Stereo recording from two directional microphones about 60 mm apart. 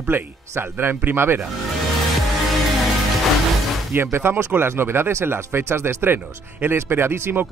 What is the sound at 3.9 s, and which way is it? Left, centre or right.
Speech, right.